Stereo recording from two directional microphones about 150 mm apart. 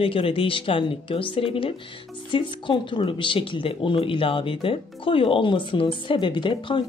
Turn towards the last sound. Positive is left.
turn(degrees=30)  # may be behind; listen again after turning